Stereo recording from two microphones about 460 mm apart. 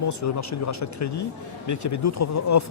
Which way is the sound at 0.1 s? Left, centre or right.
Left.